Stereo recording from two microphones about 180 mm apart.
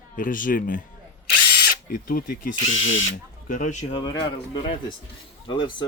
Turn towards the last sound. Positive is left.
turn(degrees=25)  # may be behind; listen again after turning